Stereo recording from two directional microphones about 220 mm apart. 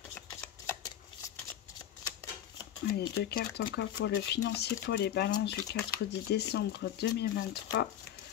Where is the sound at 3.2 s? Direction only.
40° left (ahead or behind).